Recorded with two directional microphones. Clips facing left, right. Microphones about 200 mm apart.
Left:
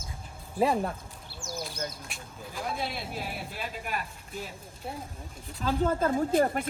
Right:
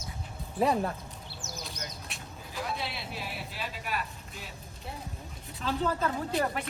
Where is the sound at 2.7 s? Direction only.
50° left (ahead or behind).